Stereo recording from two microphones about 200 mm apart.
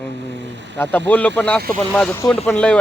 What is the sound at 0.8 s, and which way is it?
Speech, 10° left (ahead or behind).